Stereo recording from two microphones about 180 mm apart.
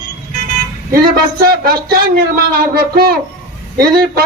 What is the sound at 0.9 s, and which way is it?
Speech, 55° right (ahead or behind).